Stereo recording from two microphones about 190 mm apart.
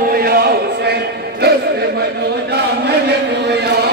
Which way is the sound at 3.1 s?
60° right (ahead or behind).